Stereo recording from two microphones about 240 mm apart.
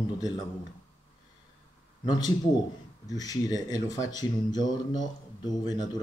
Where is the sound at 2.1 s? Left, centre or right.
Centre.